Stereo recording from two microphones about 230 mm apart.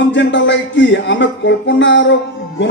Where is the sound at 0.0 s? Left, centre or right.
Left.